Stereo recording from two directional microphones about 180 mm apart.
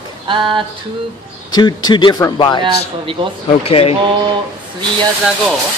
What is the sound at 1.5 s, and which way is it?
Speech, 25° left (ahead or behind).